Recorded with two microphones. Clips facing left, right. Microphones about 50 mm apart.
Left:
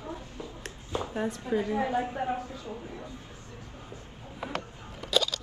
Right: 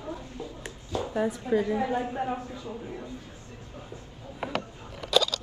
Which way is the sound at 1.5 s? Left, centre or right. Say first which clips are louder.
Right 3 dB; centre.